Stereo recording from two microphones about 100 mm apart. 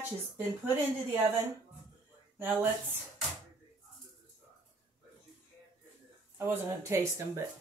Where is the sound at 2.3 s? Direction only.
20° right (ahead or behind).